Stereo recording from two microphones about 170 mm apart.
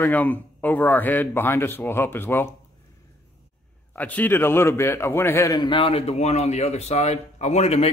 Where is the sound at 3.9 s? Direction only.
10° left (ahead or behind); by 7.8 s 40° left (ahead or behind).